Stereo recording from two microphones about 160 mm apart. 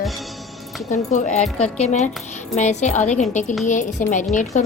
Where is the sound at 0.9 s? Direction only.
50° left (ahead or behind).